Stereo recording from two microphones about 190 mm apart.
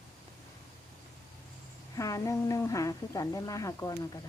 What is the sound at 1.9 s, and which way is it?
A woman's voice, 15° left (ahead or behind).